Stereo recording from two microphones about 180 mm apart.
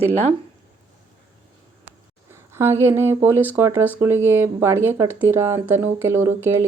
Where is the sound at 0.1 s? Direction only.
40° right (ahead or behind).